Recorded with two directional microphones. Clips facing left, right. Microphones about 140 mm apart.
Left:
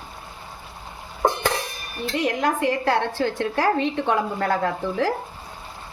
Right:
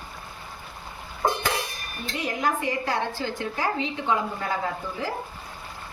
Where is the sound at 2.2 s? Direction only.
70° left (ahead or behind).